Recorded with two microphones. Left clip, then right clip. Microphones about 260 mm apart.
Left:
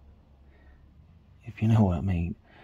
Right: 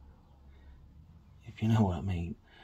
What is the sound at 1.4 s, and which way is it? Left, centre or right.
Speech, left.